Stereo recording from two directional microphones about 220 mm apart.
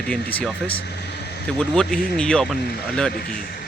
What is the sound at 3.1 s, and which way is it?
Speech, 45° left (ahead or behind).